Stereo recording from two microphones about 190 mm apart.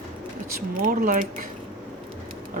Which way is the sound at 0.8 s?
45° right (ahead or behind).